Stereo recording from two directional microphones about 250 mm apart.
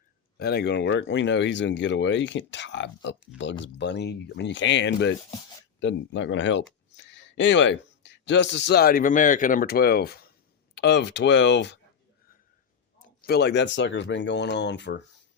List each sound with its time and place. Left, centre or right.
0.3 s speech: left
13.0 s speech: left